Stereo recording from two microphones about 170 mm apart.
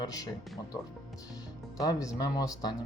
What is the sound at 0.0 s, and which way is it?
Speech, 20° left (ahead or behind).